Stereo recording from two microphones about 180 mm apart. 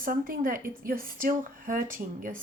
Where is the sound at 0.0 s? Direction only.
50° right (ahead or behind).